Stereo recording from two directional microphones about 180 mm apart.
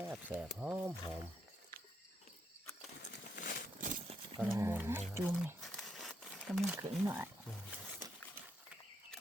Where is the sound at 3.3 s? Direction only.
55° left (ahead or behind).